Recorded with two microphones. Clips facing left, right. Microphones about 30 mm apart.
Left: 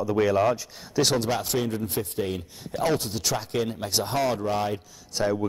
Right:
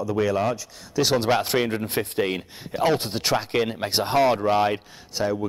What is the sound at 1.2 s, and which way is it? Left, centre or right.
Speech, right.